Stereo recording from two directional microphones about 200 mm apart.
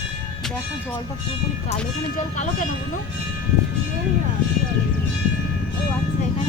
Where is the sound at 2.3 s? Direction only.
40° left (ahead or behind).